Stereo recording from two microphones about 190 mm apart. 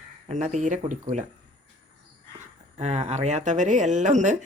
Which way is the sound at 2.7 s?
35° right (ahead or behind).